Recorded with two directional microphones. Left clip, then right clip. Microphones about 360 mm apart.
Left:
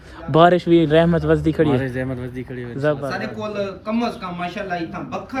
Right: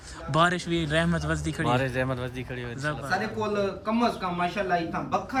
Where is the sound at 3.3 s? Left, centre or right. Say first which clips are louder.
Left 2 dB; right.